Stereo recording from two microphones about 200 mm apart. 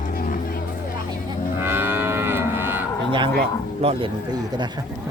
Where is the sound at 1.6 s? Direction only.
10° right (ahead or behind).